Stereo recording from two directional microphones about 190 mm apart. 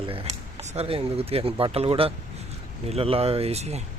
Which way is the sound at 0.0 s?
30° right (ahead or behind).